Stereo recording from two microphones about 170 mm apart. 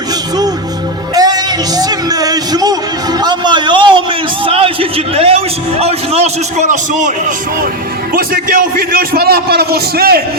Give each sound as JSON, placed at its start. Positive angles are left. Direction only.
{"t": 1.1, "sound": "music", "side_deg": -20}
{"t": 4.4, "sound": "a man's voice", "side_deg": -30}